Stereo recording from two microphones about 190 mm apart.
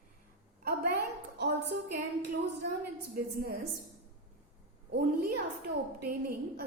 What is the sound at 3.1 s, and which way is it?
Speech, 55° right (ahead or behind).